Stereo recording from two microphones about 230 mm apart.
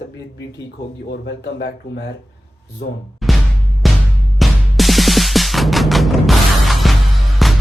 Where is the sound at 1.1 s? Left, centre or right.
Left.